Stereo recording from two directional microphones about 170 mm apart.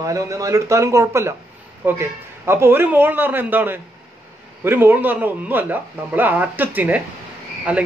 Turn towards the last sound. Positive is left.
turn(degrees=-5)  # may be behind; listen again after turning